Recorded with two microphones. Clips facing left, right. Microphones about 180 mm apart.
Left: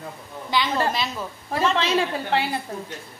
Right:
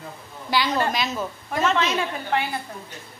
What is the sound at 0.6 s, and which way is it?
A woman's voice, 30° left (ahead or behind).